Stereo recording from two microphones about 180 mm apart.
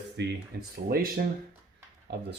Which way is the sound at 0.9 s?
55° right (ahead or behind).